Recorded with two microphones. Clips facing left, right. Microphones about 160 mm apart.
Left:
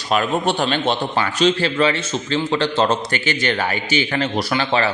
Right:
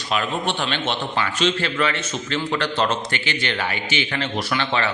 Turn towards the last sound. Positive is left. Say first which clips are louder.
# left 4 dB
turn(degrees=35)  # may be behind; listen again after turning